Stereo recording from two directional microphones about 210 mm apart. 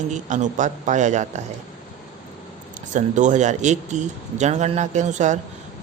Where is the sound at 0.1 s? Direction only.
35° right (ahead or behind).